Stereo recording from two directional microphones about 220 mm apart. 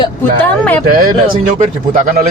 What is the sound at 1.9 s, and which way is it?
Speech, 35° right (ahead or behind).